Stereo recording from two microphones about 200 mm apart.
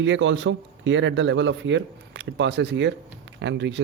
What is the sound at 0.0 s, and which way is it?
Speech, 70° right (ahead or behind).